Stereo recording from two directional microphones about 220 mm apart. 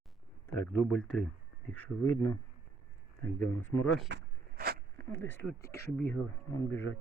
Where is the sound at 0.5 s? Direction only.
5° left (ahead or behind).